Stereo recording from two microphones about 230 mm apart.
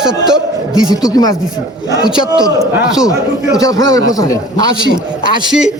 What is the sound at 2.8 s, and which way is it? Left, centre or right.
Speech, centre.